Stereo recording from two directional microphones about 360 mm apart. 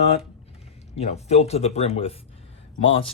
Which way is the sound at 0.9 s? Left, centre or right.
Centre.